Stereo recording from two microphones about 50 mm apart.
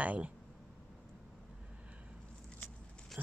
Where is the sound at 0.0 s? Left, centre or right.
Right.